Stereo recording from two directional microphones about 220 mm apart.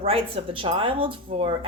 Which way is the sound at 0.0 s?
25° right (ahead or behind).